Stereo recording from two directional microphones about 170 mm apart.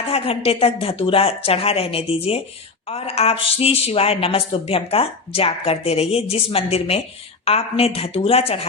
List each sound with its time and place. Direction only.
0.1 s speech: 35° left (ahead or behind)